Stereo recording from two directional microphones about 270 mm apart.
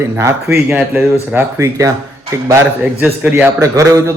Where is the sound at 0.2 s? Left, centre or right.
Centre.